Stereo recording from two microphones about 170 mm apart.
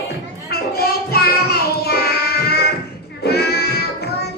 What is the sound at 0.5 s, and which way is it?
Child singing, 65° left (ahead or behind).